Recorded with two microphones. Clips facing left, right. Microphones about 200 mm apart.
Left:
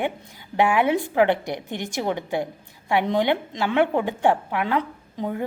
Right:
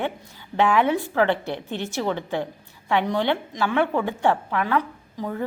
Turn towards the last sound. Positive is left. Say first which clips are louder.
# left 1 dB
turn(degrees=20)  # may be behind; listen again after turning